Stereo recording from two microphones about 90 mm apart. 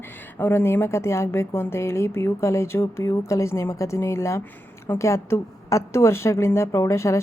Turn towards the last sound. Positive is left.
turn(degrees=35)  # may be behind; listen again after turning